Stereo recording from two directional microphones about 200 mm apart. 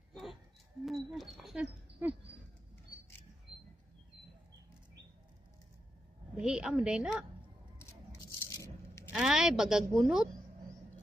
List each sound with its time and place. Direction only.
0.1 s a sound: centre (ahead or behind)
0.8 s speech: centre (ahead or behind)
6.3 s a woman's voice: 5° right (ahead or behind)
9.1 s speech: 5° right (ahead or behind)